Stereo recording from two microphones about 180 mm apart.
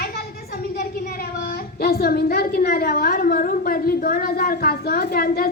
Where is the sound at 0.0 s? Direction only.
60° left (ahead or behind).